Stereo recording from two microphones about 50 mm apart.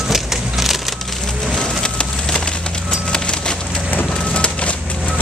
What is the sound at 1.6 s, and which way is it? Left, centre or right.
Wood, centre.